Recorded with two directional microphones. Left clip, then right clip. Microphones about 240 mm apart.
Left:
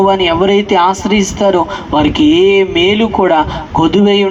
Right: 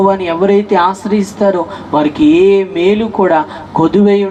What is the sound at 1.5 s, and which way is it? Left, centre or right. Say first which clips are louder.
Speech: left 2 dB; left.